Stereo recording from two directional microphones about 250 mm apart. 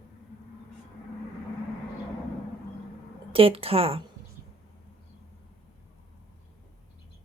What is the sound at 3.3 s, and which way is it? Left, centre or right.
Speech, right.